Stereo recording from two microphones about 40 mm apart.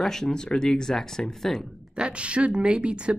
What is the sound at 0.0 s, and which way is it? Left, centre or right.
Speech, centre.